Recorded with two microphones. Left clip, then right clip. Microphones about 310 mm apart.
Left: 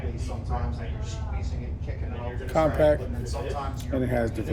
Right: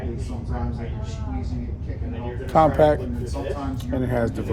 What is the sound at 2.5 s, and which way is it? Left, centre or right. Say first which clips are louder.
Speech: right 5 dB; centre.